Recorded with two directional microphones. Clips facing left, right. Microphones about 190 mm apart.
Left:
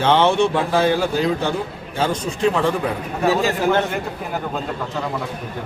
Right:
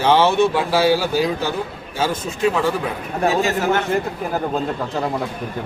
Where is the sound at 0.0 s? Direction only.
10° right (ahead or behind).